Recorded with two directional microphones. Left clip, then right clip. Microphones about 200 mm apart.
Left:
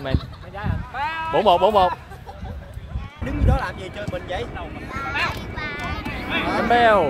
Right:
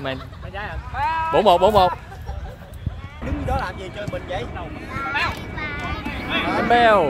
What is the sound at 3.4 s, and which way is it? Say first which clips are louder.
Speech: even; 50° left (ahead or behind).